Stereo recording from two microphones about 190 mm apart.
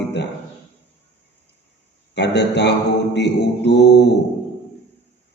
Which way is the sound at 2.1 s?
65° left (ahead or behind).